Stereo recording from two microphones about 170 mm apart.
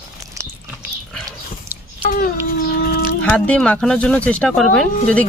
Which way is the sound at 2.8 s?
65° left (ahead or behind).